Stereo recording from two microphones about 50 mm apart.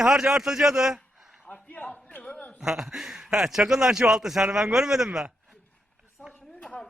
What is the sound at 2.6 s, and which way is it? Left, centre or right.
A man's voice, centre.